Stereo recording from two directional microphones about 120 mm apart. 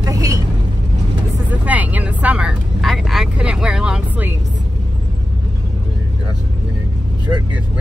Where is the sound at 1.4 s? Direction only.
15° right (ahead or behind).